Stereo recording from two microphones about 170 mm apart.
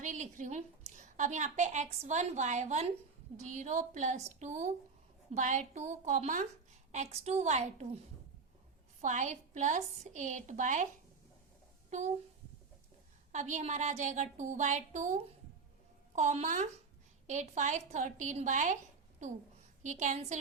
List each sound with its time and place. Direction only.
0.0 s a woman's voice: 45° right (ahead or behind)
9.0 s a woman's voice: 45° right (ahead or behind)
13.3 s a woman's voice: 45° right (ahead or behind)
19.8 s a woman's voice: 45° right (ahead or behind)